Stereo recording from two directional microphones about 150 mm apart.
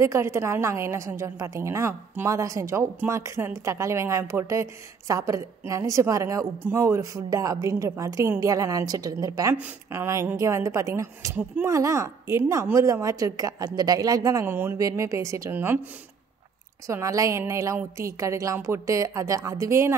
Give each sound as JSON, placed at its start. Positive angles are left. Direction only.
{"t": 0.0, "sound": "a woman's voice", "side_deg": -20}
{"t": 16.8, "sound": "a woman's voice", "side_deg": -20}